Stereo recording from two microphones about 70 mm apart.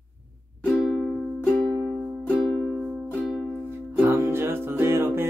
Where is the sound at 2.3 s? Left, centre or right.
Left.